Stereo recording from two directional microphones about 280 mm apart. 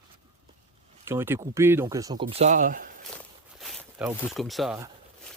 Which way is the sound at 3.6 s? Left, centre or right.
Centre.